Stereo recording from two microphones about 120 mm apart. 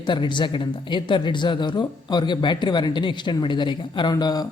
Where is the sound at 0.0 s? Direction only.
40° left (ahead or behind).